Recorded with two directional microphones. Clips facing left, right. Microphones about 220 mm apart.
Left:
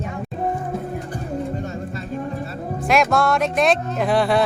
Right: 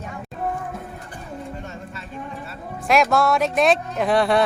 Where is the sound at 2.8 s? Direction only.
Centre (ahead or behind).